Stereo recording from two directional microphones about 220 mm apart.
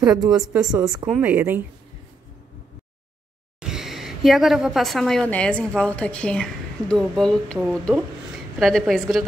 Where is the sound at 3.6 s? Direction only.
Centre (ahead or behind).